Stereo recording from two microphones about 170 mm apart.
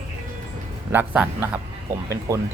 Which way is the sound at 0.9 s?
10° right (ahead or behind).